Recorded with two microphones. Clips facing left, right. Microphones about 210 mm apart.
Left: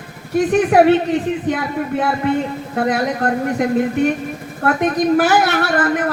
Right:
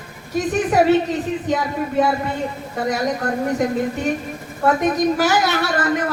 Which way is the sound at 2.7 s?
60° left (ahead or behind).